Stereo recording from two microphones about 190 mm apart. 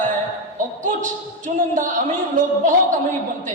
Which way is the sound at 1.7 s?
45° right (ahead or behind).